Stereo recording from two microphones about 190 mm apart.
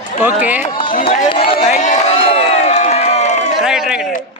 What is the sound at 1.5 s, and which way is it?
Crowd, 35° left (ahead or behind).